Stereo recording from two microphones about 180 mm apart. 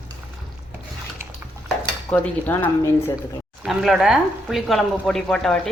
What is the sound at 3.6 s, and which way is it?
Speech, 5° right (ahead or behind).